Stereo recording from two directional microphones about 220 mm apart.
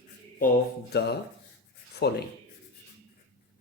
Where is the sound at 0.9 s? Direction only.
45° left (ahead or behind).